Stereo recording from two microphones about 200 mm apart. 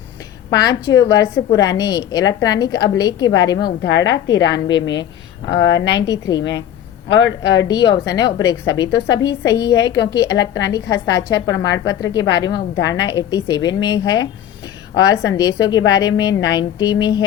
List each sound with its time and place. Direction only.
0.5 s a woman's voice: 20° left (ahead or behind)
3.8 s a woman's voice: 70° left (ahead or behind)
6.0 s a woman's voice: 20° left (ahead or behind)
7.1 s a woman's voice: 65° left (ahead or behind)
7.6 s a woman's voice: 20° left (ahead or behind)